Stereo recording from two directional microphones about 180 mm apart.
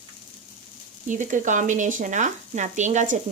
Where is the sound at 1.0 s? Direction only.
45° right (ahead or behind).